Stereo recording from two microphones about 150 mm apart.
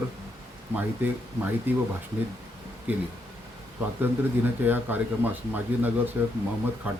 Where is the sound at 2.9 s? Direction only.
10° right (ahead or behind).